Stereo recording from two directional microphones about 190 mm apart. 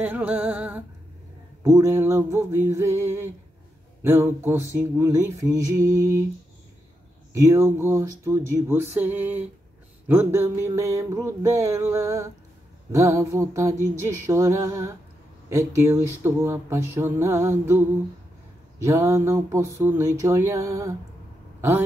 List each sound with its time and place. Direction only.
0.0 s speech: 10° right (ahead or behind)
7.3 s speech: 15° right (ahead or behind)